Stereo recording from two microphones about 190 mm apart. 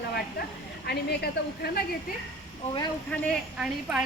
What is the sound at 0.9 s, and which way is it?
Speech, 55° left (ahead or behind).